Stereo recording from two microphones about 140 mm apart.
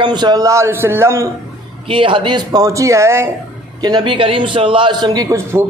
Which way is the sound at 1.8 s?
35° right (ahead or behind).